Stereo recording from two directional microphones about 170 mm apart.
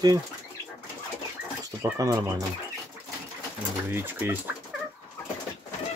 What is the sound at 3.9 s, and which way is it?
Speech, 10° right (ahead or behind).